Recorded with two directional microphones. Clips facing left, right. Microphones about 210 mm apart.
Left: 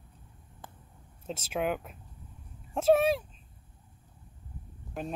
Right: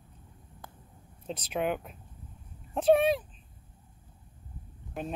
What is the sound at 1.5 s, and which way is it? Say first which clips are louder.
Speech: even; centre (ahead or behind).